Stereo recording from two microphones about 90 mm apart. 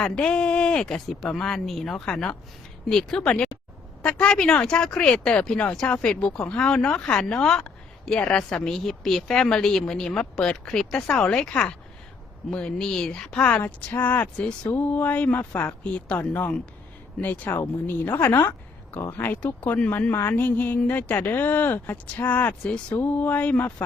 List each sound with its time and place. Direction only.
0.0 s a woman's voice: 10° left (ahead or behind)